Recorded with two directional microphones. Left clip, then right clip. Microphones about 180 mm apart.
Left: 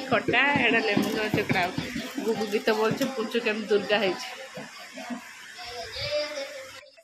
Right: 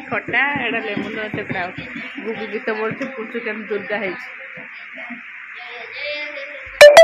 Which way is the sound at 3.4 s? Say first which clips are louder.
Even; 15° left (ahead or behind).